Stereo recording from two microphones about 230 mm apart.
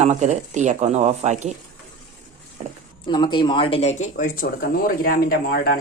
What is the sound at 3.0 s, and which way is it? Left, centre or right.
Speech, left.